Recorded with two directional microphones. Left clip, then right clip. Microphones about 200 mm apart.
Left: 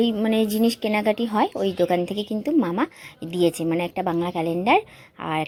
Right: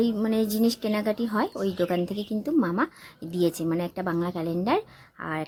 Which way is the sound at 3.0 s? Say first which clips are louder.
Left 4 dB; 30° right (ahead or behind).